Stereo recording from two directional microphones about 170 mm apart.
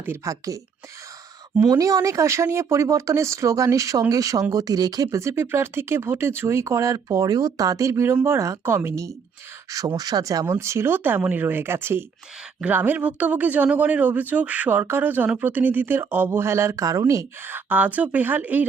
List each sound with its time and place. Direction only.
0.0 s speech: 15° right (ahead or behind)
1.6 s speech: 20° right (ahead or behind)